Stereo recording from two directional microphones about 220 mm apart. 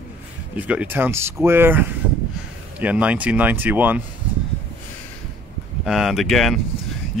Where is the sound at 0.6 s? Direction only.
5° right (ahead or behind).